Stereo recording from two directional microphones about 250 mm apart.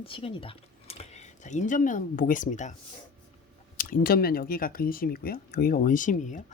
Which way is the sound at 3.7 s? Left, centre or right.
Left.